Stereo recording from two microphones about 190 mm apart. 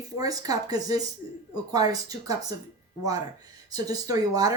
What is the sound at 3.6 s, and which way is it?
Speech, 20° right (ahead or behind).